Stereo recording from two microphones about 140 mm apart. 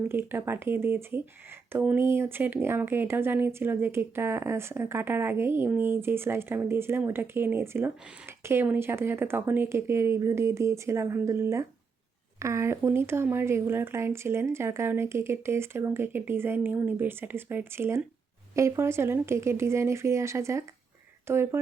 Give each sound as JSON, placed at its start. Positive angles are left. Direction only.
{"t": 0.1, "sound": "speech", "side_deg": -15}